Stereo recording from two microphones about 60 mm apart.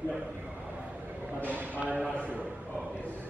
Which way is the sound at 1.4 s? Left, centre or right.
Right.